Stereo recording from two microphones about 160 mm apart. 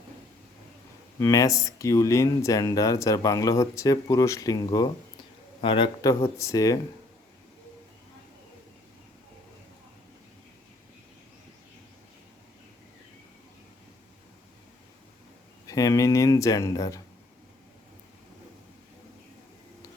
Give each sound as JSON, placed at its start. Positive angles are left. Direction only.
{"t": 1.2, "sound": "speech", "side_deg": 20}
{"t": 15.6, "sound": "speech", "side_deg": 20}